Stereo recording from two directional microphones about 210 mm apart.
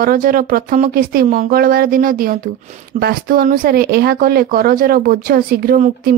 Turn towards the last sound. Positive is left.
turn(degrees=-45)  # may be behind; listen again after turning